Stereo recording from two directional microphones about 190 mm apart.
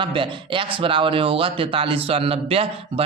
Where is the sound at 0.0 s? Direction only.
25° right (ahead or behind).